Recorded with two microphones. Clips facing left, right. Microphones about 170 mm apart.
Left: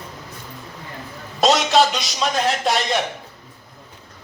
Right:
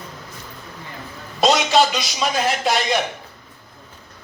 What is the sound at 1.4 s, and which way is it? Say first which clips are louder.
A man's voice: even; centre (ahead or behind).